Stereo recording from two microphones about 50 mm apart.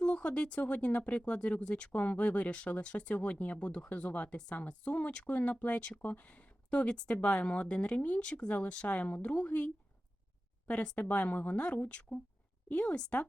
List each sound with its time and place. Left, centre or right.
0.0 s speech: left